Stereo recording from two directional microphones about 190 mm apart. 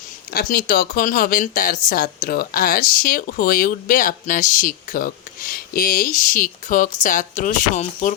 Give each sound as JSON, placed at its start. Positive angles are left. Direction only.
{"t": 0.3, "sound": "speech", "side_deg": 45}